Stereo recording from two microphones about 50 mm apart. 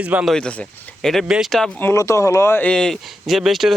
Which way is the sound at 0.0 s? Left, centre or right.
Right.